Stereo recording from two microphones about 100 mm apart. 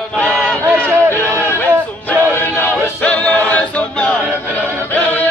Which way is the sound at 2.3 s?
15° left (ahead or behind).